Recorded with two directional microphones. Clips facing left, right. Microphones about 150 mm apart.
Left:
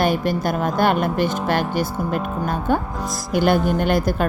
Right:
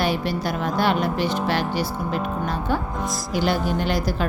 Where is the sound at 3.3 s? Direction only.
50° left (ahead or behind).